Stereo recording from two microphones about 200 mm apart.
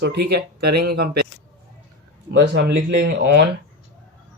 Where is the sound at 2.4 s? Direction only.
55° right (ahead or behind).